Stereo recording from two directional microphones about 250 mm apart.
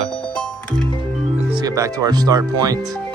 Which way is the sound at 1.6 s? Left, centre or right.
Centre.